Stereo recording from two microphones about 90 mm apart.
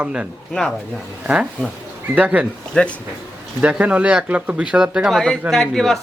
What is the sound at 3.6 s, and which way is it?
Speech, 15° right (ahead or behind).